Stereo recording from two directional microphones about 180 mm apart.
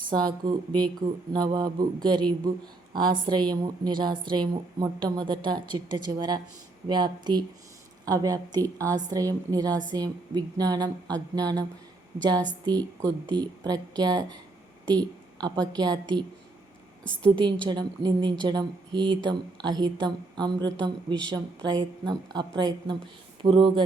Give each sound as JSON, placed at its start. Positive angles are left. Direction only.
{"t": 0.1, "sound": "speech", "side_deg": -25}
{"t": 14.8, "sound": "a sound", "side_deg": -25}
{"t": 15.6, "sound": "speech", "side_deg": -25}
{"t": 17.3, "sound": "speech", "side_deg": -25}